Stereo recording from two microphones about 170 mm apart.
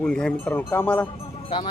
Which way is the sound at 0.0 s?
5° left (ahead or behind).